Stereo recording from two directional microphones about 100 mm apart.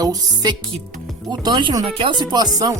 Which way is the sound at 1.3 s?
50° right (ahead or behind).